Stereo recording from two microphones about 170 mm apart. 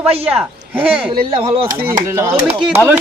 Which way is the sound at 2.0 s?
15° right (ahead or behind).